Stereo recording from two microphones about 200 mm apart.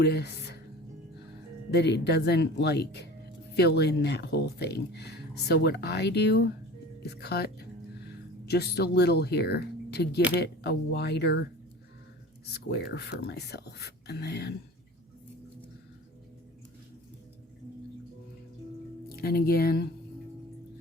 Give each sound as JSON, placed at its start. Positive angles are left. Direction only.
{"t": 0.0, "sound": "speech", "side_deg": 55}
{"t": 1.7, "sound": "speech", "side_deg": 55}
{"t": 12.5, "sound": "speech", "side_deg": 55}
{"t": 19.1, "sound": "speech", "side_deg": 50}